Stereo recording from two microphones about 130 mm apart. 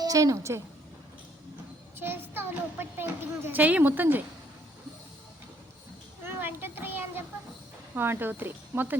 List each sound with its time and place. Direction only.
0.0 s a woman's voice: 25° right (ahead or behind)
2.0 s a child's voice: 15° right (ahead or behind)
6.2 s a child's voice: 15° right (ahead or behind)